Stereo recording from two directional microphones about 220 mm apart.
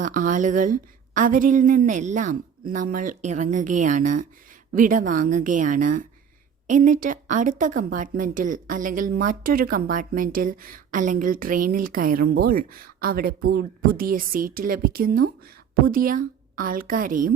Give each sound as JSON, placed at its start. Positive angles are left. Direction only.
{"t": 0.0, "sound": "a woman's voice", "side_deg": -35}